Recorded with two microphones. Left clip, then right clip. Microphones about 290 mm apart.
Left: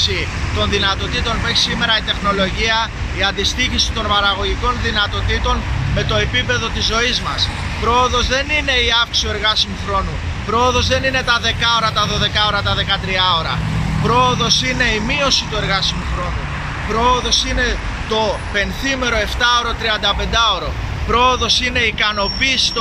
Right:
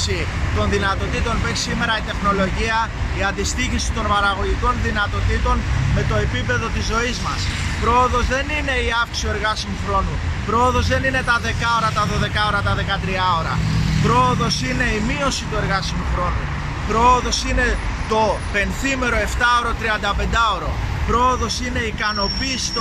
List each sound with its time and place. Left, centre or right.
0.0 s speech: centre
16.9 s speech: centre